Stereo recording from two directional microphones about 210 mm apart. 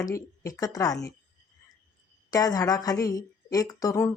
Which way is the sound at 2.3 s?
15° left (ahead or behind).